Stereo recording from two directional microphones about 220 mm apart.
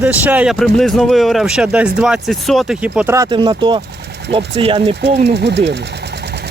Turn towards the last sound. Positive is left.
turn(degrees=-50)  # may be behind; listen again after turning